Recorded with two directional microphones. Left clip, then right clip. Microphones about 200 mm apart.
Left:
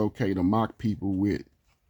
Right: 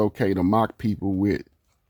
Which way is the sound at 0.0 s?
35° right (ahead or behind).